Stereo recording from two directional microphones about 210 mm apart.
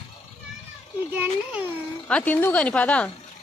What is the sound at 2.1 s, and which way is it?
Speech, 5° left (ahead or behind).